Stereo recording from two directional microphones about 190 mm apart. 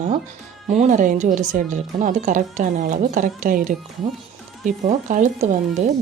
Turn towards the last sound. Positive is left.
turn(degrees=-40)  # may be behind; listen again after turning